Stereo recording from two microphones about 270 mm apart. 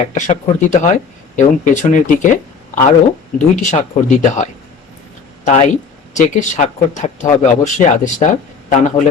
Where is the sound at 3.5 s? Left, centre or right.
Left.